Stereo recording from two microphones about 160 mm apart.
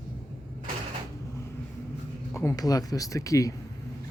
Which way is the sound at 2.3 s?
20° left (ahead or behind).